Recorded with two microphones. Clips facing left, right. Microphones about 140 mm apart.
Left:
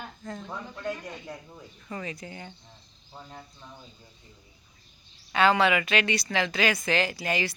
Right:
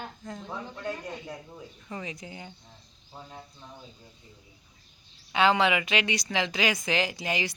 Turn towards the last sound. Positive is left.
turn(degrees=-15)  # may be behind; listen again after turning